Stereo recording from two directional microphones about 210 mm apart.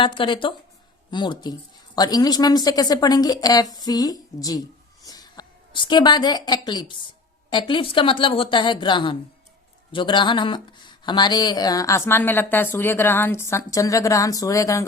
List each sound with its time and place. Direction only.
0.0 s a woman's voice: 25° left (ahead or behind)